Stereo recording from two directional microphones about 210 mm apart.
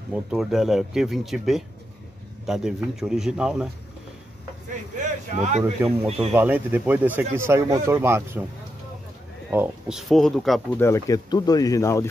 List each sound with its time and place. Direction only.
0.1 s speech: centre (ahead or behind)
4.9 s speech: 35° right (ahead or behind)
6.3 s speech: 10° right (ahead or behind)
9.5 s speech: 5° right (ahead or behind)
10.8 s speech: 15° left (ahead or behind)